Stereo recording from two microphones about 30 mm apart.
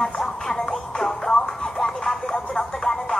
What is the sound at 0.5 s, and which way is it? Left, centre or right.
Music, centre.